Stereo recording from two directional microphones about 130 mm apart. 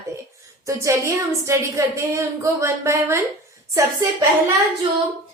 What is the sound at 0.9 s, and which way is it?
A woman's voice, 20° right (ahead or behind).